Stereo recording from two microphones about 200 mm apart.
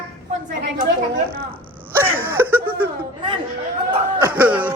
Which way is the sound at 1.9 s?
10° right (ahead or behind).